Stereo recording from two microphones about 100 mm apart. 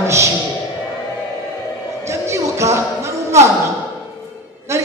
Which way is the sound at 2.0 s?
30° right (ahead or behind).